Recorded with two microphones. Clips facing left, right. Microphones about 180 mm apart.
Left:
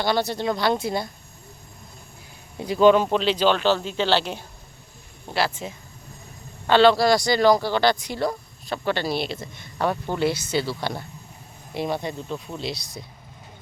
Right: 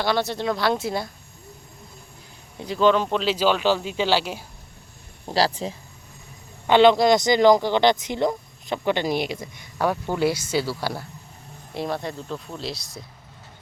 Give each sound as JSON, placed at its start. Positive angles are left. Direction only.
{"t": 0.0, "sound": "speech", "side_deg": 0}
{"t": 2.6, "sound": "speech", "side_deg": 10}
{"t": 5.3, "sound": "speech", "side_deg": -35}
{"t": 6.7, "sound": "speech", "side_deg": -20}